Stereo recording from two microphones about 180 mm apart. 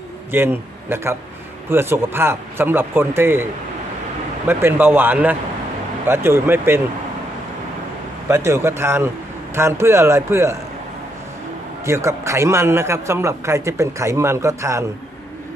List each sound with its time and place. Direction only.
0.3 s a man's voice: 10° right (ahead or behind)
4.4 s a man's voice: 10° right (ahead or behind)
8.3 s a man's voice: 15° right (ahead or behind)
11.9 s a man's voice: 15° right (ahead or behind)